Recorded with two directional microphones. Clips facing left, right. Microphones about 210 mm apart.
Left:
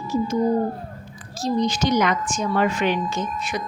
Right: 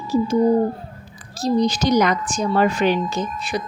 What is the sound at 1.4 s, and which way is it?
A woman's voice, 35° right (ahead or behind).